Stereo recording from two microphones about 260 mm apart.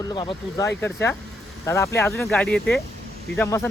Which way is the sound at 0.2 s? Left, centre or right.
Centre.